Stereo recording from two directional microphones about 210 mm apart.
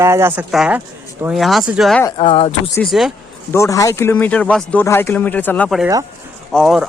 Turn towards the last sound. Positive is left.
turn(degrees=0)  # may be behind; listen again after turning